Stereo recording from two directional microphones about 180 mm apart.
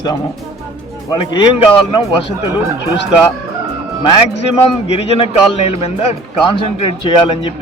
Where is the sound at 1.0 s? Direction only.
25° left (ahead or behind).